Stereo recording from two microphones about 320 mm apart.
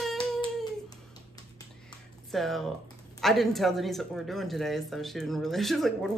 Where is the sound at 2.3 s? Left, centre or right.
Centre.